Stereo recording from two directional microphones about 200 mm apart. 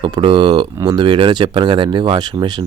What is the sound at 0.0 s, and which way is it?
Speech, 25° right (ahead or behind).